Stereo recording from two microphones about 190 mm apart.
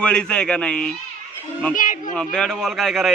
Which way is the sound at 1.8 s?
45° left (ahead or behind).